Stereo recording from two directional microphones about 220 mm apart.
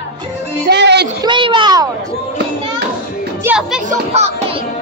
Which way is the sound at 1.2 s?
20° right (ahead or behind).